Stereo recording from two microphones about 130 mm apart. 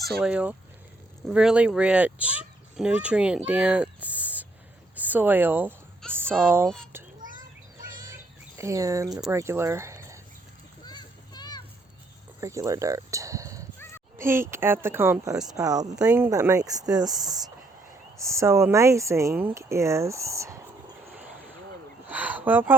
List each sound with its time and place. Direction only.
0.2 s speech: 10° right (ahead or behind)
6.0 s speech: 5° left (ahead or behind)
6.4 s speech: 20° right (ahead or behind)
8.1 s bird: 25° right (ahead or behind)
9.3 s speech: 20° right (ahead or behind)
10.8 s children playing: 30° left (ahead or behind)
12.4 s speech: 25° right (ahead or behind)
22.1 s speech: 15° right (ahead or behind)